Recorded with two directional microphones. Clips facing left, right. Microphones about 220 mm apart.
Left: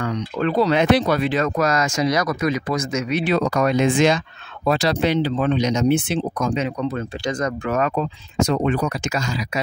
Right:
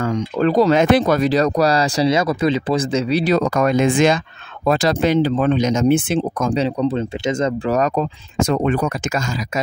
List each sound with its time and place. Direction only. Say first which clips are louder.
0.0 s speech: right 4 dB; 40° right (ahead or behind)
6.5 s speech: right 5 dB; 35° right (ahead or behind); by 9.3 s 50° right (ahead or behind)